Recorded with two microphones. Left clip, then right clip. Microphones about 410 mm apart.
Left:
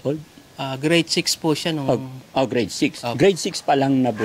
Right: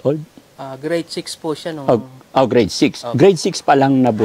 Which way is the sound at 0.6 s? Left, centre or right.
Left.